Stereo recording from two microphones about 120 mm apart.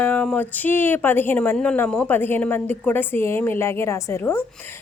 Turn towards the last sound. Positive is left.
turn(degrees=20)  # may be behind; listen again after turning